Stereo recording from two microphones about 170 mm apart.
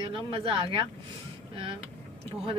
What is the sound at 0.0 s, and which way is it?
Speech, 30° right (ahead or behind).